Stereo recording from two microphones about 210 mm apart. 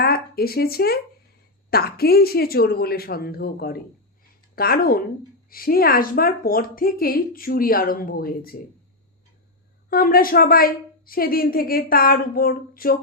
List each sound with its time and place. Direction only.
0.0 s a sound: 45° left (ahead or behind)
1.7 s a woman's voice: 50° left (ahead or behind)
9.9 s a woman's voice: 45° left (ahead or behind)